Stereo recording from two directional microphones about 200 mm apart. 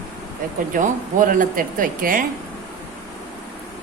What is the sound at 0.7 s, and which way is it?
Speech, 40° right (ahead or behind).